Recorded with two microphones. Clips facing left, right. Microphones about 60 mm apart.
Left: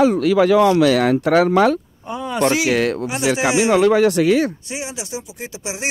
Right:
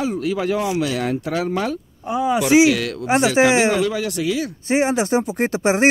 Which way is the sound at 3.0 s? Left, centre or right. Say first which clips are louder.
Right 3 dB; right.